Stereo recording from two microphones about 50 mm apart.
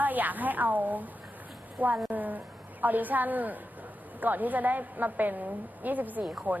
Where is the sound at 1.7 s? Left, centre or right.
Right.